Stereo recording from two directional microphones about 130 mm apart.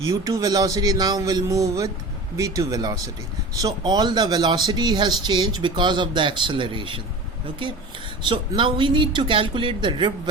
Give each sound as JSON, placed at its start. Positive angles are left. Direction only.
{"t": 0.1, "sound": "speech", "side_deg": -30}
{"t": 8.2, "sound": "speech", "side_deg": -40}